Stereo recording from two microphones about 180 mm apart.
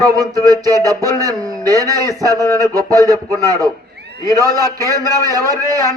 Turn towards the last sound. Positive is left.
turn(degrees=-20)  # may be behind; listen again after turning